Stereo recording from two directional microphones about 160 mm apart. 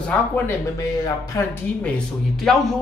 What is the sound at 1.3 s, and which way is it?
Speech, 20° left (ahead or behind).